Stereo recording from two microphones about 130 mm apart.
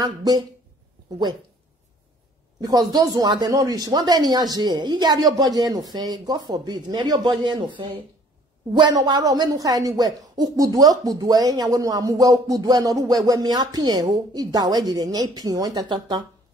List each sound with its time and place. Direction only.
0.0 s speech: 30° right (ahead or behind)
2.6 s speech: 30° right (ahead or behind)